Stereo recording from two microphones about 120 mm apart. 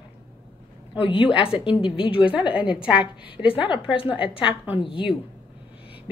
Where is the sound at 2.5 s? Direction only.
10° right (ahead or behind).